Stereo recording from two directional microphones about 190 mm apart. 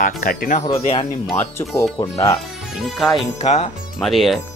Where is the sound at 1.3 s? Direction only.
15° left (ahead or behind).